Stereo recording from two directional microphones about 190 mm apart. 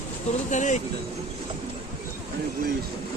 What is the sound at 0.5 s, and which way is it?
Speech, 40° left (ahead or behind).